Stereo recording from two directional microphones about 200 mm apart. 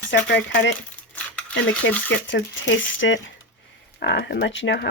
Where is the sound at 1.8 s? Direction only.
65° left (ahead or behind).